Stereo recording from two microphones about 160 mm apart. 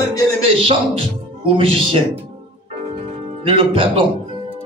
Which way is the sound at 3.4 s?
35° right (ahead or behind).